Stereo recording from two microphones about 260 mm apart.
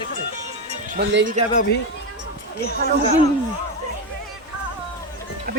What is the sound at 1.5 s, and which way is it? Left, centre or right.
Speech, left.